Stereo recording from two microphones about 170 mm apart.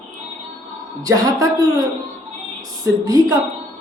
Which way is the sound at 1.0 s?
20° right (ahead or behind).